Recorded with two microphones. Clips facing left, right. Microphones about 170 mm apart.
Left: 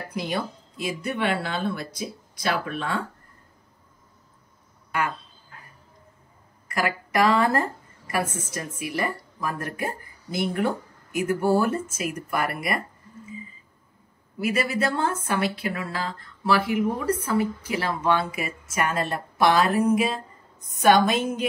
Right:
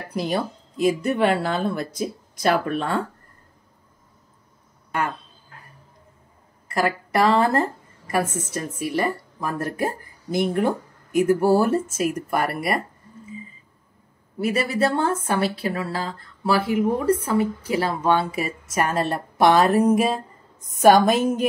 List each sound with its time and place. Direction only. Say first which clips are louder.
0.1 s speech: right 5 dB; 40° right (ahead or behind)
6.7 s speech: right 3 dB; 35° right (ahead or behind)
14.4 s speech: right 3 dB; 30° right (ahead or behind)